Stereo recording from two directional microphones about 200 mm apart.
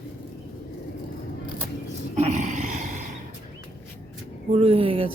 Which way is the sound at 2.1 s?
35° right (ahead or behind).